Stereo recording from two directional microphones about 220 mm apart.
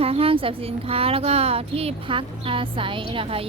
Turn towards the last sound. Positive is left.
turn(degrees=-25)  # may be behind; listen again after turning